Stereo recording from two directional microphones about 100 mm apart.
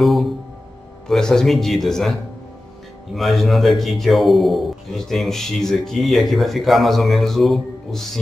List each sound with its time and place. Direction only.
0.0 s a man's voice: centre (ahead or behind)